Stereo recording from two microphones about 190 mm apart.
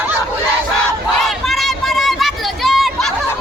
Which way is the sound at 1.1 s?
Centre (ahead or behind).